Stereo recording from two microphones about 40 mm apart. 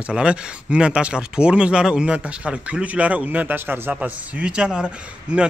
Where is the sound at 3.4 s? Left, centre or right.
Right.